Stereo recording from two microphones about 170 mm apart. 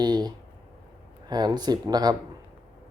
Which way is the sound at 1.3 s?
25° right (ahead or behind).